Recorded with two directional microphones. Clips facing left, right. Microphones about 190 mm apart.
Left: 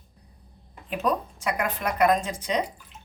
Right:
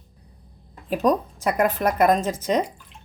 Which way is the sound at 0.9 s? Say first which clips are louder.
Right 6 dB; 40° right (ahead or behind).